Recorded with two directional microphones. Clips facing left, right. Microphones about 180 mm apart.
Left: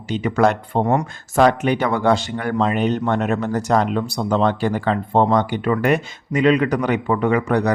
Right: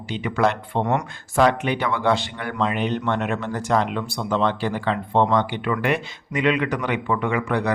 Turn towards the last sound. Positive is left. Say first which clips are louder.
# left 5 dB
turn(degrees=40)  # may be behind; listen again after turning